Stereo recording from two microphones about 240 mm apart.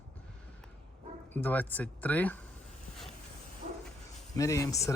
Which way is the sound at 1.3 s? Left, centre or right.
Centre.